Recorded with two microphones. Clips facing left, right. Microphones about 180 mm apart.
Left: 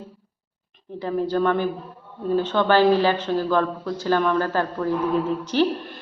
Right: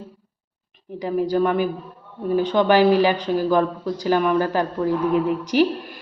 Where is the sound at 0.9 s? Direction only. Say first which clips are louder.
Right 2 dB; 10° right (ahead or behind).